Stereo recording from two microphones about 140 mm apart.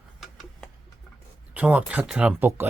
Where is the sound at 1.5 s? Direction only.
10° right (ahead or behind).